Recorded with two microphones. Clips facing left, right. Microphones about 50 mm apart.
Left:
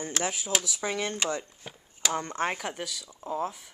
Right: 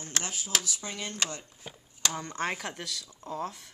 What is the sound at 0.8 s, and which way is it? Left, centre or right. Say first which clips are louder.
Speech: left 8 dB; left.